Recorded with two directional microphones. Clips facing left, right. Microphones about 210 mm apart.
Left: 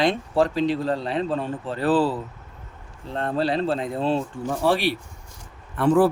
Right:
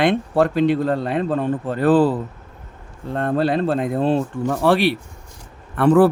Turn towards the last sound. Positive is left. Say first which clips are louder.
# right 4 dB
turn(degrees=-65)  # may be behind; listen again after turning